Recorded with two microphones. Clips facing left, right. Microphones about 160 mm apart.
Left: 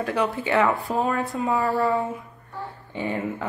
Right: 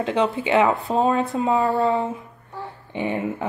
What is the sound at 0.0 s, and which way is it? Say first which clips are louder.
Speech: right 3 dB; 25° right (ahead or behind).